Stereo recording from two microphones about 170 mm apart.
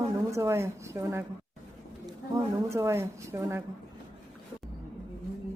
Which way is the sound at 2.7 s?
15° right (ahead or behind).